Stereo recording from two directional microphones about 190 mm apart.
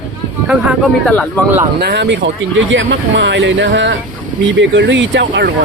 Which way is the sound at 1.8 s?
60° right (ahead or behind).